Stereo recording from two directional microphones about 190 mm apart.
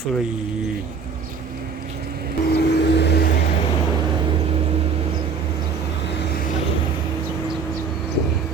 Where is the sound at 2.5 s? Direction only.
60° left (ahead or behind).